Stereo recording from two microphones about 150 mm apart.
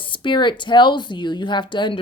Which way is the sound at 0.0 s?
35° left (ahead or behind).